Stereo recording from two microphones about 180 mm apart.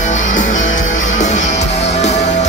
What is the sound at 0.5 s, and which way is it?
Music, 90° left.